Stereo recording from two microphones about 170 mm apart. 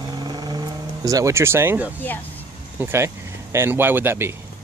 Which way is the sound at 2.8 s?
15° right (ahead or behind).